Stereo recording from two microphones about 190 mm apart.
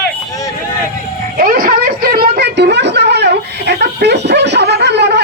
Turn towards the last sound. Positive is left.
turn(degrees=-65)  # may be behind; listen again after turning